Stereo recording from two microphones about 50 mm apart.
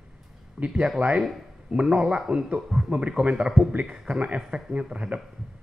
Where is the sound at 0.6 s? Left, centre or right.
Centre.